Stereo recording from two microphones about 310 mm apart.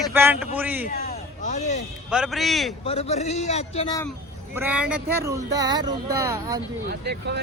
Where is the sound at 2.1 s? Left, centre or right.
Centre.